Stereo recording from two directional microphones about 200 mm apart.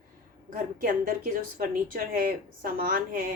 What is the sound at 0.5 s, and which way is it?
A woman's voice, 45° right (ahead or behind).